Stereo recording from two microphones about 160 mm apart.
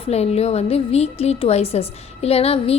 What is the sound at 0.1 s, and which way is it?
A woman's voice, 40° left (ahead or behind).